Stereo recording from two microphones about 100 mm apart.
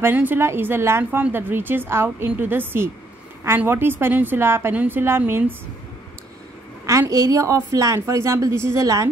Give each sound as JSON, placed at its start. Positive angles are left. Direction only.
{"t": 0.0, "sound": "a woman's voice", "side_deg": -20}
{"t": 6.9, "sound": "a woman's voice", "side_deg": -30}